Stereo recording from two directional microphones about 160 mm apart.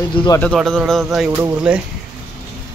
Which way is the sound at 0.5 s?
Centre (ahead or behind).